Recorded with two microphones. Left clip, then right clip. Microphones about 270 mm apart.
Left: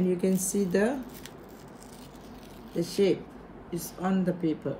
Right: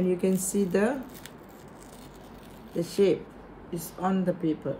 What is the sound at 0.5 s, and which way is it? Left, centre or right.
Speech, centre.